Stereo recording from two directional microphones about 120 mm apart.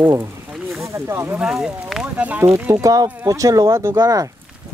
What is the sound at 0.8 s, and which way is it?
Speech, 25° right (ahead or behind).